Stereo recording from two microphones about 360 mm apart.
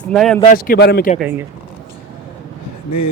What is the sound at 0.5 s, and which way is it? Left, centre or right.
Speech, left.